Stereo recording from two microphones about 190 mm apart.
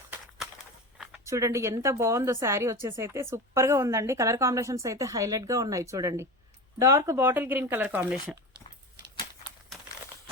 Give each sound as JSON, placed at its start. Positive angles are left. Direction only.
{"t": 1.3, "sound": "a woman's voice", "side_deg": -15}